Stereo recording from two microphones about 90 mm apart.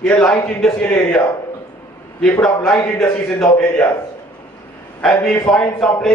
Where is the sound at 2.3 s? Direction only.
15° left (ahead or behind).